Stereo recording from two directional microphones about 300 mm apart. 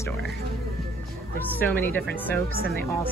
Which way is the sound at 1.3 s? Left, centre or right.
Centre.